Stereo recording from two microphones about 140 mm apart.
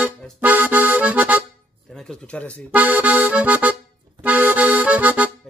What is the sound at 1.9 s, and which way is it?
Speech, 5° left (ahead or behind).